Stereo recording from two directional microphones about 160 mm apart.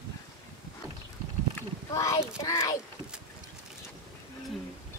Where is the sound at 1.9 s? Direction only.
20° left (ahead or behind).